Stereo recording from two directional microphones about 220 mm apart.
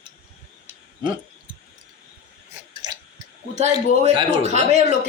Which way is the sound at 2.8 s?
20° right (ahead or behind).